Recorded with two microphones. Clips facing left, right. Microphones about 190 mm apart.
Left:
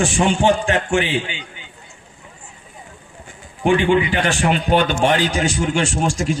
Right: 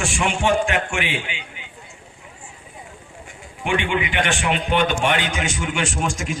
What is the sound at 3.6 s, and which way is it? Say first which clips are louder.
A man's voice: left 7 dB; 35° left (ahead or behind).